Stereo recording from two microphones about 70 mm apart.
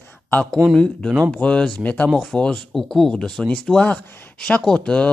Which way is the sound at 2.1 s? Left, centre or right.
Centre.